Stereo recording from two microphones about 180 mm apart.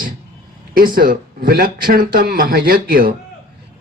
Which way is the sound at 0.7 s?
50° right (ahead or behind).